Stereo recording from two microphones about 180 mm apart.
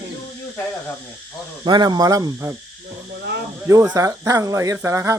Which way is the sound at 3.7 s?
15° right (ahead or behind).